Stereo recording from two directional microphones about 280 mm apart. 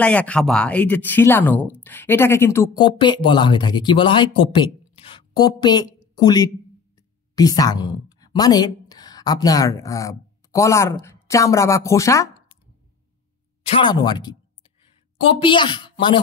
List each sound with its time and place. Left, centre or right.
0.0 s a woman's voice: centre
13.7 s speech: centre